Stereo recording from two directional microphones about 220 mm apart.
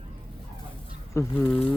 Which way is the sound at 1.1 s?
15° left (ahead or behind).